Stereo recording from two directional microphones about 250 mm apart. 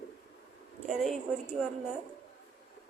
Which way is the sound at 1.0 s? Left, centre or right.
Centre.